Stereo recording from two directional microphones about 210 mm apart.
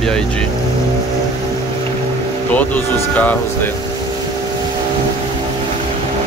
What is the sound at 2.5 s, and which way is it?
Speech, 5° left (ahead or behind).